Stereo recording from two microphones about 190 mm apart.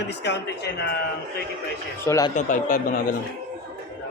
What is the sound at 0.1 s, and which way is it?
Speech, 60° left (ahead or behind).